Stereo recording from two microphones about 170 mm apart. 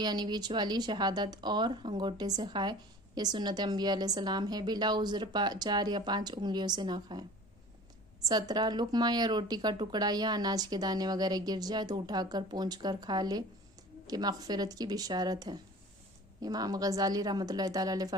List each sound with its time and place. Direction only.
0.0 s speech: 25° right (ahead or behind)